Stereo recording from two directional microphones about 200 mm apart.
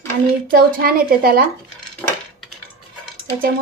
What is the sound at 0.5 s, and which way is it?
Speech, 45° right (ahead or behind).